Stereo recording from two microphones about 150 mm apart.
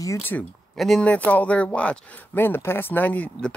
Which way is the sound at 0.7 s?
5° left (ahead or behind).